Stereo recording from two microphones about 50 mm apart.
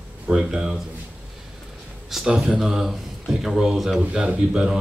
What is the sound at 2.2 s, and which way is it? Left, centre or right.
Speech, centre.